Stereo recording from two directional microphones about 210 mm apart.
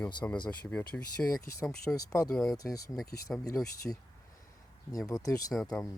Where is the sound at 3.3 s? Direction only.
5° left (ahead or behind).